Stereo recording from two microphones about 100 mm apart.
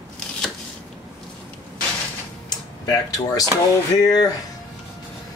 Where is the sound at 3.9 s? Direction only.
40° left (ahead or behind).